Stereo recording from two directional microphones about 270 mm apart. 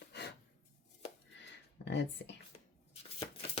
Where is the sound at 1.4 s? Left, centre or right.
Left.